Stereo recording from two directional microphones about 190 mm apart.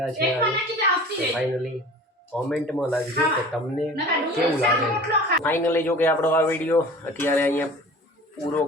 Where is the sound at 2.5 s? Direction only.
5° left (ahead or behind).